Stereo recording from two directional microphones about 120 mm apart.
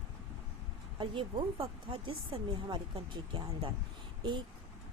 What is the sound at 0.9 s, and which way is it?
Speech, 45° right (ahead or behind).